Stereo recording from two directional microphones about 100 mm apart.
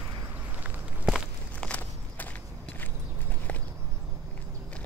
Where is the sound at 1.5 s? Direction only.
10° left (ahead or behind).